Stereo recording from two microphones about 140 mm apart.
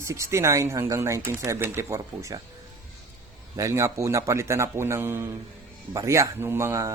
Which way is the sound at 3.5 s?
20° right (ahead or behind).